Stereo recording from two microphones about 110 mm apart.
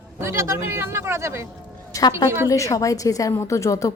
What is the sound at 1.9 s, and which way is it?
A woman's voice, 30° left (ahead or behind).